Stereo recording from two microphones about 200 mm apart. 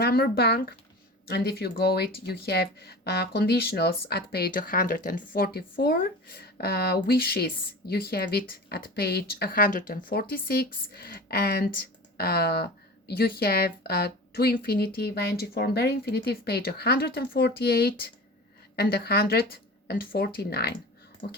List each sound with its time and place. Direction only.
0.0 s speech: 50° left (ahead or behind)